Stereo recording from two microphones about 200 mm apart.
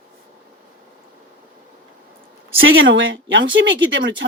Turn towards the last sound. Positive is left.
turn(degrees=-65)  # may be behind; listen again after turning